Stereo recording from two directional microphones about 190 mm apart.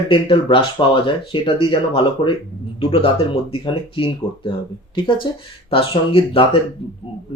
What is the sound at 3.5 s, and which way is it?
Speech, 25° left (ahead or behind).